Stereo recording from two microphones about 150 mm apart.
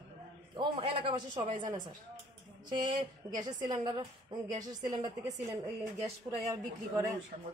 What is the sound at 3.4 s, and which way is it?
A woman's voice, 25° right (ahead or behind).